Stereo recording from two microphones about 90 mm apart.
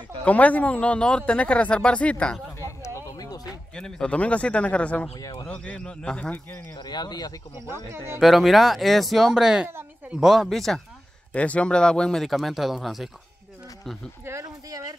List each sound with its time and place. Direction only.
0.2 s a man's voice: 15° left (ahead or behind)
2.6 s a sound: 35° left (ahead or behind)
3.7 s a man's voice: 10° left (ahead or behind)
5.1 s a man's voice: 35° left (ahead or behind)
5.5 s a man's voice: 10° left (ahead or behind)
6.7 s speech: 50° left (ahead or behind)
7.7 s speech: 30° right (ahead or behind)
8.2 s speech: centre (ahead or behind)
11.3 s speech: 15° left (ahead or behind); by 13.1 s centre (ahead or behind)
14.4 s a sound: 40° right (ahead or behind)